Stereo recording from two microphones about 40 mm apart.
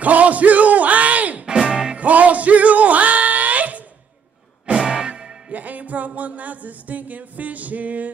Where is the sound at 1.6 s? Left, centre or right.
Centre.